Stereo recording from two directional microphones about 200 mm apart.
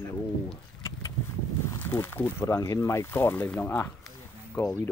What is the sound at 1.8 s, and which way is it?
Speech, 10° left (ahead or behind).